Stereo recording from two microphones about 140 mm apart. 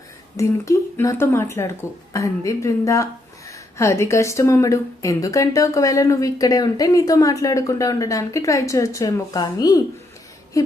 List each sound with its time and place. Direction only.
0.3 s a woman's voice: 20° left (ahead or behind)